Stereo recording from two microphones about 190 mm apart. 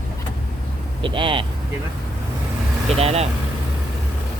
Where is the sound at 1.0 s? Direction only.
25° right (ahead or behind).